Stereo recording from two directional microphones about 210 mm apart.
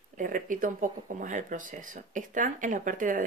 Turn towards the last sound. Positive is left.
turn(degrees=-40)  # may be behind; listen again after turning